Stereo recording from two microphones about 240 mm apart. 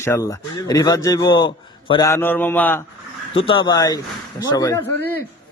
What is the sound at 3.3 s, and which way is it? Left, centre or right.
A man's voice, left.